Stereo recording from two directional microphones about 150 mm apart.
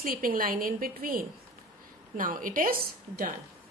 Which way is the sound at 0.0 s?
70° right (ahead or behind).